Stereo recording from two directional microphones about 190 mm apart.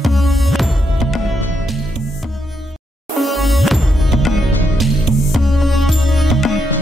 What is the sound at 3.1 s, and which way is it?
Music, centre (ahead or behind).